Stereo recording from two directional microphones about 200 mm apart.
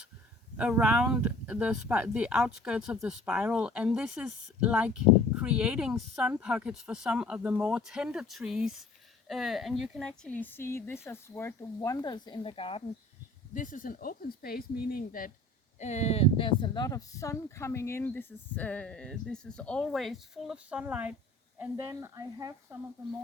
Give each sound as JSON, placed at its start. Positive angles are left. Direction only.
{"t": 0.5, "sound": "speech", "side_deg": -5}
{"t": 13.5, "sound": "speech", "side_deg": 40}
{"t": 15.8, "sound": "speech", "side_deg": 35}